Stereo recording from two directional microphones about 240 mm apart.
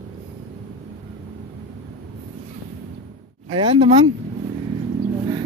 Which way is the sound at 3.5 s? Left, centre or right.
Right.